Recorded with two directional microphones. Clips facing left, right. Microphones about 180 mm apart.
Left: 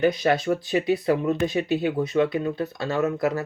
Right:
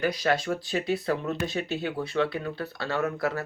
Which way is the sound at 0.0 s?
25° left (ahead or behind).